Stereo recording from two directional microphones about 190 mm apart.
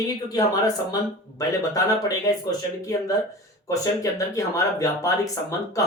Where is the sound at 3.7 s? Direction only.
15° left (ahead or behind).